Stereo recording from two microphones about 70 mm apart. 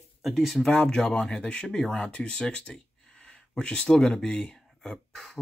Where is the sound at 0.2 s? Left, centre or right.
Centre.